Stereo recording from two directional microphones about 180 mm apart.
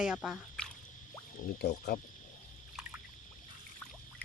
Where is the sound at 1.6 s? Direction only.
65° left (ahead or behind).